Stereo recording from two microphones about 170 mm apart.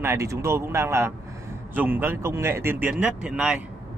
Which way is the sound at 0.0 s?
15° right (ahead or behind).